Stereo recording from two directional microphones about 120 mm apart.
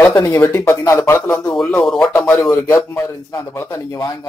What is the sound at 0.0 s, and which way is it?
Speech, 20° left (ahead or behind).